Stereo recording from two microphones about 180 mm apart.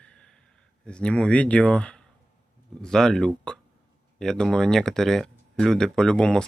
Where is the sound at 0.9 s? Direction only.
5° left (ahead or behind).